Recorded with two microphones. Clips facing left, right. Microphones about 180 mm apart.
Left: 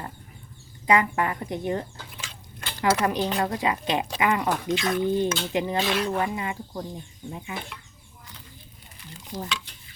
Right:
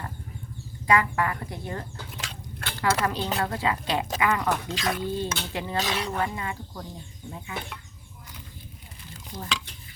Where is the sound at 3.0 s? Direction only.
20° left (ahead or behind).